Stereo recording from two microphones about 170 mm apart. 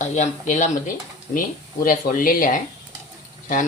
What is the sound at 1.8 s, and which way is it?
Speech, 55° left (ahead or behind).